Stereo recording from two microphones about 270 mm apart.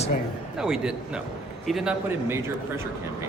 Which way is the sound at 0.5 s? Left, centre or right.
Centre.